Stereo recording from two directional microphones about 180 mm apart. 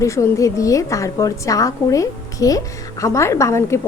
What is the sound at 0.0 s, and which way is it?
A woman's voice, 15° left (ahead or behind).